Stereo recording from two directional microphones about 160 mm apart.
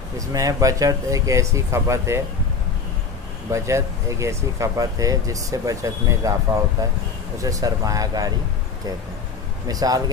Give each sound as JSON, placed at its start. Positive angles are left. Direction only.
{"t": 0.3, "sound": "speech", "side_deg": -20}
{"t": 3.5, "sound": "speech", "side_deg": -20}
{"t": 9.7, "sound": "speech", "side_deg": -25}